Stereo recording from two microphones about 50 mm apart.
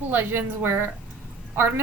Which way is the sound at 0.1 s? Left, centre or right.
Right.